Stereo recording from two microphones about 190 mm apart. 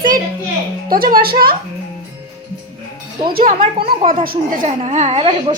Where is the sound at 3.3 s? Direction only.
50° right (ahead or behind).